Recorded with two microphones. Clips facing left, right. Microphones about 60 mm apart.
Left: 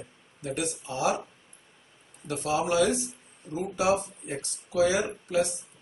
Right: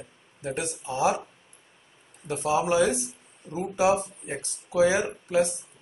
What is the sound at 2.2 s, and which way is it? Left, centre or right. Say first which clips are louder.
Speech: right 3 dB; right.